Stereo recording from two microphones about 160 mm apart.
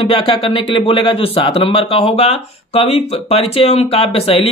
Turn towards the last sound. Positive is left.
turn(degrees=35)  # may be behind; listen again after turning